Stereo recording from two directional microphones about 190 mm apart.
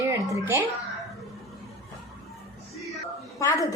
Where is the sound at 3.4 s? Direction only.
15° left (ahead or behind).